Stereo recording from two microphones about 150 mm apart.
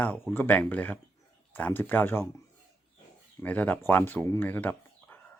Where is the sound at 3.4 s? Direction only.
10° left (ahead or behind).